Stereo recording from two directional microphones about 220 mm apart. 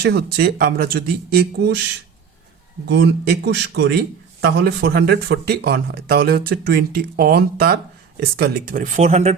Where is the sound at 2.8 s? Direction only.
50° right (ahead or behind).